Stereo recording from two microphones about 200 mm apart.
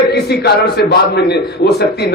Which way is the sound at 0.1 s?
55° left (ahead or behind).